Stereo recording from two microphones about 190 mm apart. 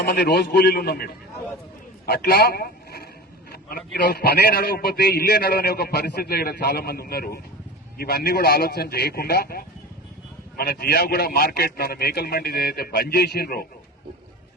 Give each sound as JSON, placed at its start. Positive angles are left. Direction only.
{"t": 0.0, "sound": "a man's voice", "side_deg": 55}